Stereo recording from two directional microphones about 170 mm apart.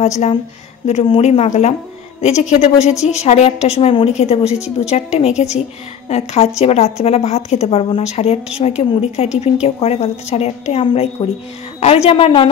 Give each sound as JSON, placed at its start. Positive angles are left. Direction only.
{"t": 0.0, "sound": "a woman's voice", "side_deg": 45}